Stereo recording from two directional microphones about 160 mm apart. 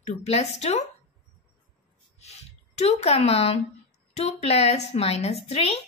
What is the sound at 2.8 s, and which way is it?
A woman's voice, 45° left (ahead or behind).